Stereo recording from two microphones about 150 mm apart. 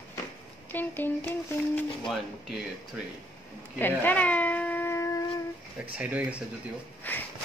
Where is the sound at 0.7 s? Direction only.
15° left (ahead or behind).